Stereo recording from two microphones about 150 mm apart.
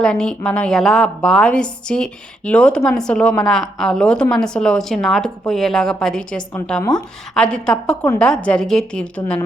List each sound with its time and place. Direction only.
0.0 s a woman's voice: 5° left (ahead or behind)